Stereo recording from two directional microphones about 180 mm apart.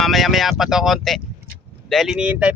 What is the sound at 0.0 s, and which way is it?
Speech, centre (ahead or behind).